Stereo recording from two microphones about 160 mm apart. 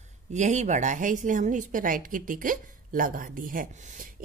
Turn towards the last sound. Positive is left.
turn(degrees=-60)  # may be behind; listen again after turning